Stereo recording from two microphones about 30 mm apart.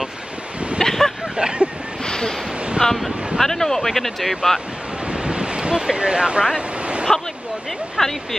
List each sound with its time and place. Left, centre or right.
0.8 s a sound: centre
1.3 s vehicle: right
2.0 s a sound: left
2.8 s speech: centre
5.0 s waves: right
7.1 s speech: centre